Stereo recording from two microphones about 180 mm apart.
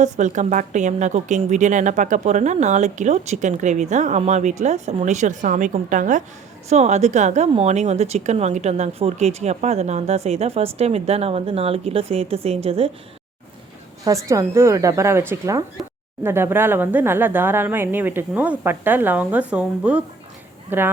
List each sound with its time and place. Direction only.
0.0 s a woman's voice: 45° right (ahead or behind)
14.0 s speech: 15° right (ahead or behind)